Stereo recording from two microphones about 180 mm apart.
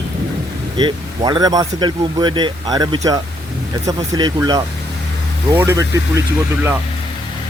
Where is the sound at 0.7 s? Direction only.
25° right (ahead or behind).